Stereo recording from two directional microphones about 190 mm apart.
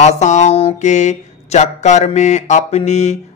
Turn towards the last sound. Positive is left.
turn(degrees=35)  # may be behind; listen again after turning